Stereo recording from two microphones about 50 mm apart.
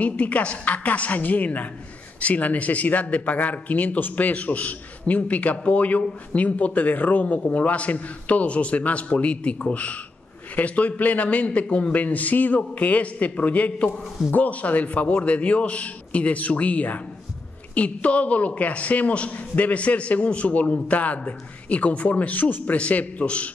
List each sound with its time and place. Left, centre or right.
0.0 s a man's voice: left